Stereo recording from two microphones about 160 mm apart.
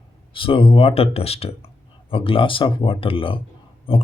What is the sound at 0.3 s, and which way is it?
Speech, 35° left (ahead or behind).